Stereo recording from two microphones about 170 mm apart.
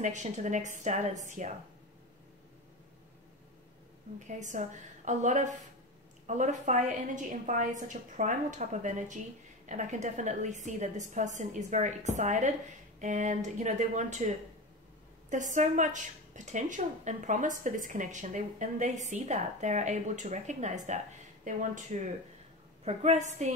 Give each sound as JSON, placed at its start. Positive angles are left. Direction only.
{"t": 0.0, "sound": "a woman's voice", "side_deg": -45}
{"t": 4.3, "sound": "a woman's voice", "side_deg": -45}
{"t": 15.5, "sound": "a woman's voice", "side_deg": -45}